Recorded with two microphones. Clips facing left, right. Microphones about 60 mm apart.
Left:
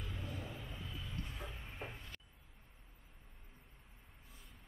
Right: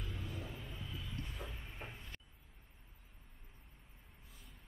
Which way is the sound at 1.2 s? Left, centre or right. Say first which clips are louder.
Even; centre.